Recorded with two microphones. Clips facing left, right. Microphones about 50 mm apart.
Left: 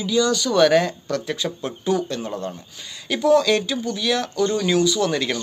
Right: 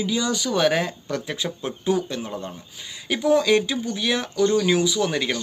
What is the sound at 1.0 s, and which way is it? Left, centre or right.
Speech, right.